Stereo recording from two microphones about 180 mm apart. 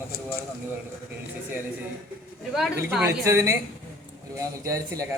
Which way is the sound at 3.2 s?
15° right (ahead or behind).